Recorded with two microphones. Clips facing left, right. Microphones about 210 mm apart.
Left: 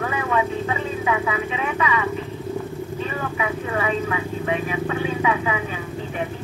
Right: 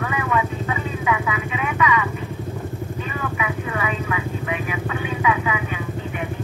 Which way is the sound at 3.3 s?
30° left (ahead or behind).